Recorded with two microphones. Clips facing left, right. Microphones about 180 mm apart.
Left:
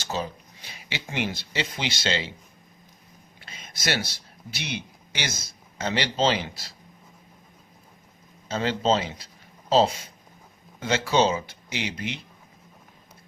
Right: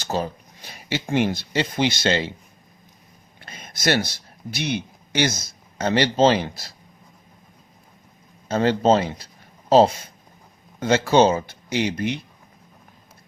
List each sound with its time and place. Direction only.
0.0 s speech: 45° right (ahead or behind)
3.4 s a sound: 50° right (ahead or behind)
5.7 s speech: 50° right (ahead or behind)
8.4 s speech: 55° right (ahead or behind)